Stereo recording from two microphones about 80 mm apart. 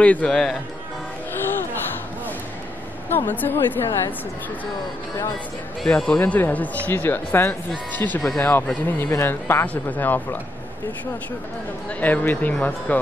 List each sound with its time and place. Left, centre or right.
0.0 s a man's voice: centre
3.1 s a woman's voice: left
5.9 s a woman's voice: centre
11.9 s a woman's voice: centre